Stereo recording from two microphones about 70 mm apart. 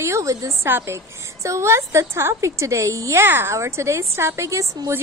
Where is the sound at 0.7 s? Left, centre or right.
Right.